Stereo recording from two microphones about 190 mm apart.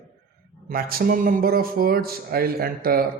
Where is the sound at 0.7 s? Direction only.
50° right (ahead or behind).